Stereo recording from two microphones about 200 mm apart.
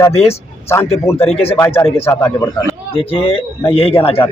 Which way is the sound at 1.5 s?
10° left (ahead or behind).